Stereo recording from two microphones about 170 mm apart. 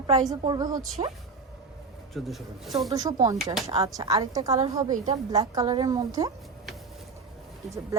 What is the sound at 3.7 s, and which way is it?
Speech, 35° right (ahead or behind).